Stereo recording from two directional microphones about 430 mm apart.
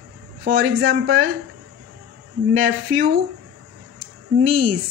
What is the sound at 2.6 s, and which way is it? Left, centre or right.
Speech, right.